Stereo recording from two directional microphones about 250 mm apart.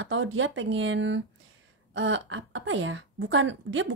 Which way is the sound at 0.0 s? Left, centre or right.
Right.